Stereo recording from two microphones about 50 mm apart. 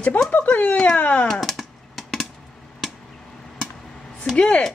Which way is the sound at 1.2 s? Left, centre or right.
Centre.